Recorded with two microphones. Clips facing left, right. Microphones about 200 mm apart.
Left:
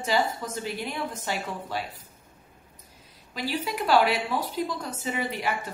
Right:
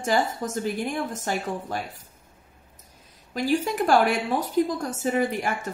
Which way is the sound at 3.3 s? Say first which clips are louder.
Right 6 dB; 45° right (ahead or behind).